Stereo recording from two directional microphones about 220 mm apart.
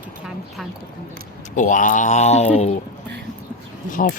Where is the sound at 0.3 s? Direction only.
Centre (ahead or behind).